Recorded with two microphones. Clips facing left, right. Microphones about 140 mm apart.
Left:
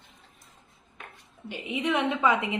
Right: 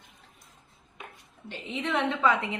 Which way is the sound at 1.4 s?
15° left (ahead or behind).